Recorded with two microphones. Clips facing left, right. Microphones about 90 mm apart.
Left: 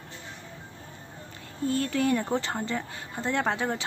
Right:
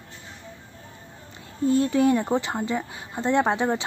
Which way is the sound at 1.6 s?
20° right (ahead or behind).